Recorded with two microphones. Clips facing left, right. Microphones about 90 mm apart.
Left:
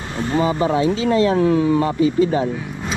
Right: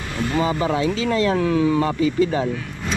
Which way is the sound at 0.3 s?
30° left (ahead or behind).